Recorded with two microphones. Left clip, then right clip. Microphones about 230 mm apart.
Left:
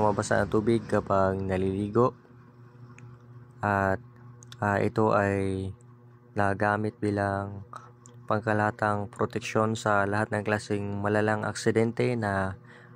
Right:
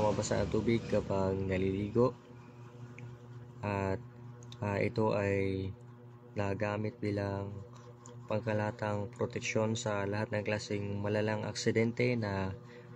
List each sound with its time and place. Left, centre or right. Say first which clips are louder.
0.0 s speech: left 7 dB; left
3.6 s speech: left 10 dB; left